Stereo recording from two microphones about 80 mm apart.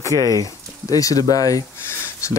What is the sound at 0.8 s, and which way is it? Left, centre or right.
Speech, left.